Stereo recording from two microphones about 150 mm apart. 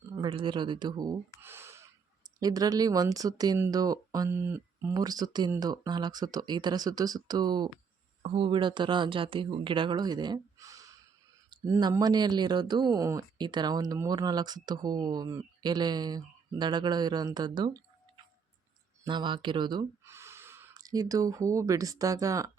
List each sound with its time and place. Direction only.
0.2 s speech: 35° right (ahead or behind)
19.0 s speech: 30° right (ahead or behind)
20.1 s speech: 20° right (ahead or behind)